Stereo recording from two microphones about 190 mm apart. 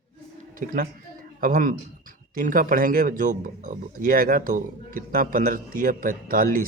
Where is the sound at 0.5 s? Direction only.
45° right (ahead or behind).